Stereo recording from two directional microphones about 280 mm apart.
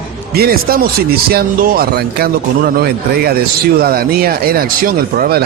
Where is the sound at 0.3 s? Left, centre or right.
Right.